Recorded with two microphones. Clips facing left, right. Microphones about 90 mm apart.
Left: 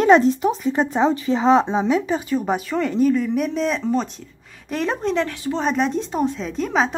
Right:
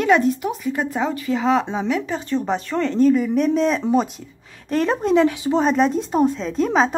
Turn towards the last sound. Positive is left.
turn(degrees=0)  # may be behind; listen again after turning